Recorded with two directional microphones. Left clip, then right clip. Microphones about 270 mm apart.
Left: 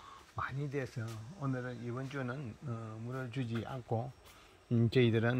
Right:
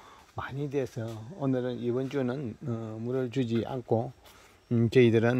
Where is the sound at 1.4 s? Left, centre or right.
Right.